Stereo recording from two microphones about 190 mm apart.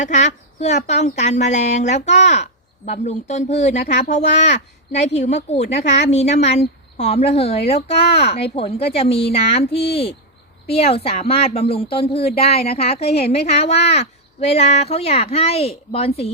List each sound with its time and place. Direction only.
0.0 s speech: 40° left (ahead or behind)